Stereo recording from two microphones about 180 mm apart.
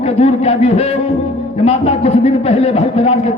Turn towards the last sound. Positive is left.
turn(degrees=35)  # may be behind; listen again after turning